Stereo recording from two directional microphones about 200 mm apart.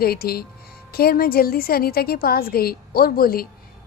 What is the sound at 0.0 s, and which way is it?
A woman's voice, 50° left (ahead or behind).